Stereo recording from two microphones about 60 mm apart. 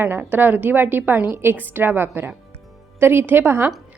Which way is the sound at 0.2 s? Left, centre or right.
Right.